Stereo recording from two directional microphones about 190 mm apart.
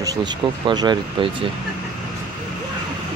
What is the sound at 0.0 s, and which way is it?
Speech, 20° right (ahead or behind).